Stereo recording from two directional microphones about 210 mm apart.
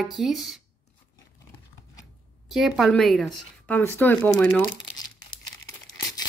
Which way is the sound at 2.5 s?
Centre (ahead or behind).